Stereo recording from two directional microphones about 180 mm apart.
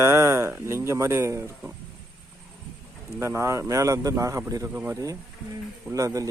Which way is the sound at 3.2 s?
15° right (ahead or behind).